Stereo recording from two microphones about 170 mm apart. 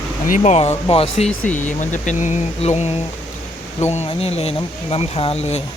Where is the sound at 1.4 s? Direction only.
10° left (ahead or behind).